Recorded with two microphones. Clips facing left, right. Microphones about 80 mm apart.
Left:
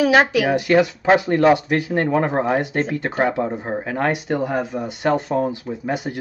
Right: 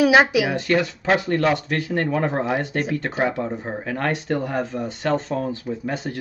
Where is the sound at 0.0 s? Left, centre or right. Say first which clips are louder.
Even; centre.